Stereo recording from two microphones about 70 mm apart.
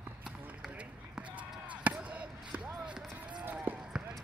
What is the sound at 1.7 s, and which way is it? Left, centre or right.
Basketball bounce, centre.